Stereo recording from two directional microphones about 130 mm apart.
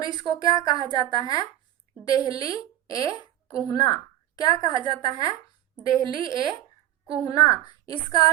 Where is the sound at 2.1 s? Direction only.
30° left (ahead or behind).